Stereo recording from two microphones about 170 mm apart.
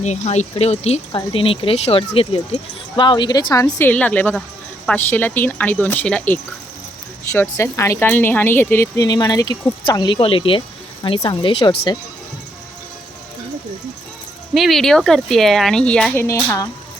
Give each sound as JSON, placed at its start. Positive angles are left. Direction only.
{"t": 0.0, "sound": "speech", "side_deg": 40}
{"t": 14.5, "sound": "speech", "side_deg": 0}
{"t": 16.1, "sound": "speech", "side_deg": 15}